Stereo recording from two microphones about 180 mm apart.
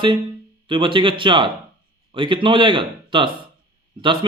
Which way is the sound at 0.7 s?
25° right (ahead or behind).